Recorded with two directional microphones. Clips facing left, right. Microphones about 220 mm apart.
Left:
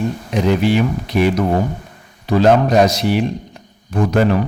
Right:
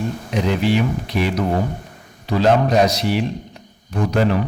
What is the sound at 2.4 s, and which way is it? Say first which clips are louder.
Speech: left 3 dB; 50° left (ahead or behind).